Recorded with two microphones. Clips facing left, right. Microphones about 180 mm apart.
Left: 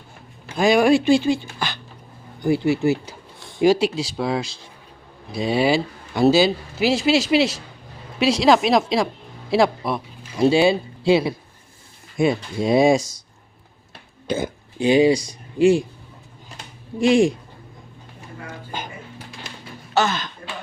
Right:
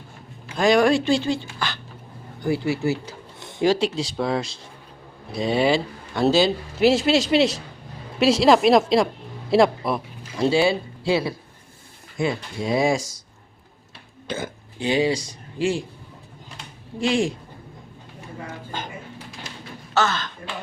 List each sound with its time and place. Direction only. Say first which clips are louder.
0.5 s a man's voice: left 2 dB; 10° left (ahead or behind)
10.4 s speech: left 3 dB; 15° left (ahead or behind)
14.3 s speech: left 6 dB; 15° left (ahead or behind)
17.0 s speech: left 6 dB; 15° left (ahead or behind)
19.9 s speech: left 2 dB; 15° left (ahead or behind)